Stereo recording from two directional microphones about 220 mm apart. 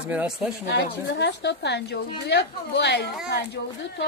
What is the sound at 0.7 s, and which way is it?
A woman's voice, 50° left (ahead or behind).